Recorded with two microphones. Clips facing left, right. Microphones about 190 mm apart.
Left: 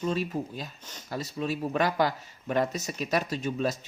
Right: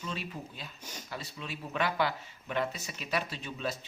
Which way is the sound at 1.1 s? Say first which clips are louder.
Left 11 dB; 40° left (ahead or behind).